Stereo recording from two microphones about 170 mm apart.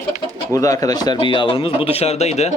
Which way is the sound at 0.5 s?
20° left (ahead or behind).